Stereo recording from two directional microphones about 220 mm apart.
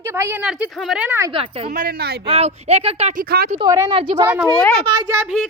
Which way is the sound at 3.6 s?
20° right (ahead or behind).